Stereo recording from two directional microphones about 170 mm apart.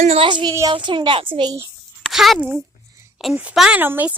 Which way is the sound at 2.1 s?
Centre (ahead or behind).